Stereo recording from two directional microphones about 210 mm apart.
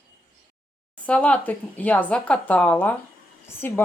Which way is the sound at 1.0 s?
5° left (ahead or behind).